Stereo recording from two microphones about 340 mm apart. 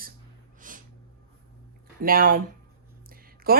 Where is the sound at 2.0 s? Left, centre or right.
Right.